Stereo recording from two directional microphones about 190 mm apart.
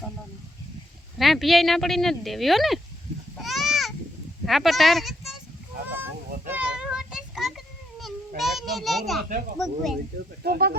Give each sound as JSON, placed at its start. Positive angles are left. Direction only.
{"t": 1.2, "sound": "speech", "side_deg": 0}
{"t": 3.3, "sound": "a sound", "side_deg": 0}
{"t": 4.4, "sound": "speech", "side_deg": 0}
{"t": 6.5, "sound": "a sound", "side_deg": -5}
{"t": 8.4, "sound": "speech", "side_deg": 0}
{"t": 10.4, "sound": "speech", "side_deg": -55}